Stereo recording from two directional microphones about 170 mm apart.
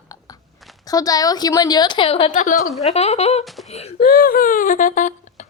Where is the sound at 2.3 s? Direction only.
45° left (ahead or behind).